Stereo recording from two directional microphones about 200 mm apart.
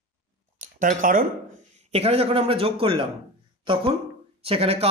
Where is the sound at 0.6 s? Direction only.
40° right (ahead or behind).